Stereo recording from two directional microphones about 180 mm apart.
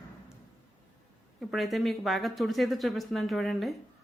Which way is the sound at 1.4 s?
Centre (ahead or behind).